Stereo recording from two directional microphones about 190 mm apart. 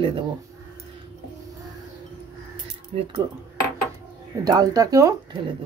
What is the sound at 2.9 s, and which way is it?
Speech, 30° right (ahead or behind).